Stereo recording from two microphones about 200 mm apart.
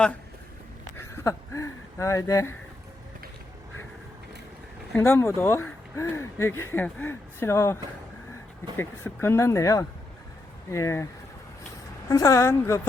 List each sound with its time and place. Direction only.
0.9 s a sound: 15° left (ahead or behind)
4.9 s speech: 10° left (ahead or behind)
8.8 s speech: 10° left (ahead or behind)
12.0 s speech: 15° left (ahead or behind)